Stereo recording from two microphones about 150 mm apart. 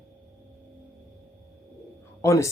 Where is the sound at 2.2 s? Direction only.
20° left (ahead or behind).